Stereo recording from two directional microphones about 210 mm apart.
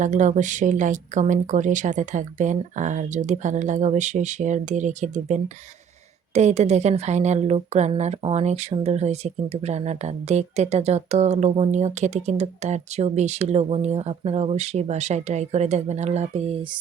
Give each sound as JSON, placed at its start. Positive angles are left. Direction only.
{"t": 0.0, "sound": "a woman's voice", "side_deg": -35}